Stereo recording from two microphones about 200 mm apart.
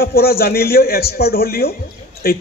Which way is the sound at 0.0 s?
50° left (ahead or behind).